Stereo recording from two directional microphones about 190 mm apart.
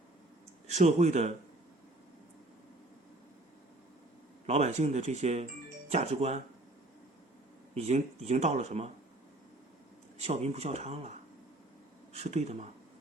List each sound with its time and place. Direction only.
0.7 s speech: 40° right (ahead or behind)
4.4 s speech: 35° right (ahead or behind)
7.7 s speech: 35° right (ahead or behind)
10.2 s speech: 35° right (ahead or behind)
12.1 s speech: 35° right (ahead or behind)